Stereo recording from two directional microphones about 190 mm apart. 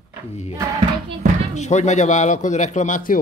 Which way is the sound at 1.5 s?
40° left (ahead or behind).